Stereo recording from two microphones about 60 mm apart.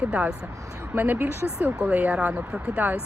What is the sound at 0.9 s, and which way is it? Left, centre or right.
Speech, right.